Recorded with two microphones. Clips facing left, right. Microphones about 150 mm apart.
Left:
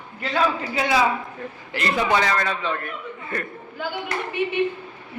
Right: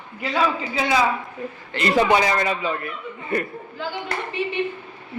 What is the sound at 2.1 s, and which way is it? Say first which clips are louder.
Speech: right 2 dB; 15° right (ahead or behind).